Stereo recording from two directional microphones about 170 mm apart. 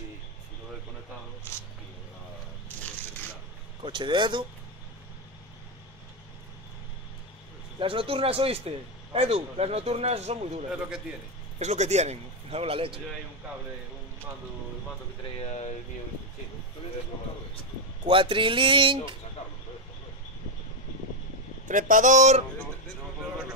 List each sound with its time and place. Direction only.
3.8 s speech: 30° right (ahead or behind)
7.8 s a man's voice: 30° right (ahead or behind)
10.7 s a man's voice: 5° right (ahead or behind)
11.6 s a man's voice: 40° right (ahead or behind)
15.3 s speech: 40° left (ahead or behind)
18.0 s speech: 30° right (ahead or behind)
21.6 s speech: 50° right (ahead or behind)